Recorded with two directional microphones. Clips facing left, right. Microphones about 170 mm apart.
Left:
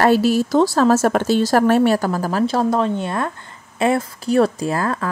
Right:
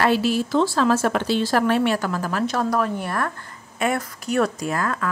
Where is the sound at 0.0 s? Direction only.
40° left (ahead or behind).